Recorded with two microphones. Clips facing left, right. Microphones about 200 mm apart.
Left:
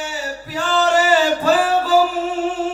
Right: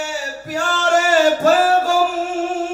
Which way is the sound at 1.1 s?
45° right (ahead or behind).